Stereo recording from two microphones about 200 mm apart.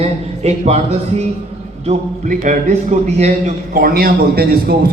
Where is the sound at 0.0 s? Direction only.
30° right (ahead or behind).